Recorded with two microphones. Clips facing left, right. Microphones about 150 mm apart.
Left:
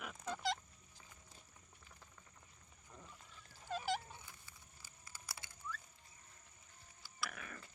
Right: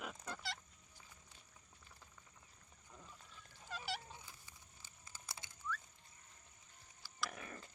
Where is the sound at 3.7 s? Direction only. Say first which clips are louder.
Left 6 dB; 45° left (ahead or behind).